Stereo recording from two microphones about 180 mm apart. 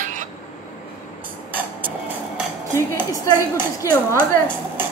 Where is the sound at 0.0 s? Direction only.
45° right (ahead or behind).